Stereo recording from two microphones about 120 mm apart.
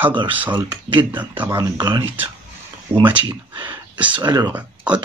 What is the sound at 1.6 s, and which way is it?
Speech, 35° right (ahead or behind).